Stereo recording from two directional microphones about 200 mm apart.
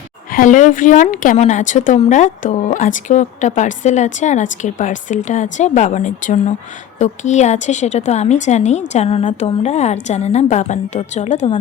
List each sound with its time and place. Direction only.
0.3 s a woman's voice: 40° left (ahead or behind)